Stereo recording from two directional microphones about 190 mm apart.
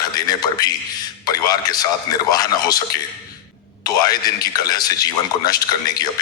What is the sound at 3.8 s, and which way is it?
Speech, 20° left (ahead or behind).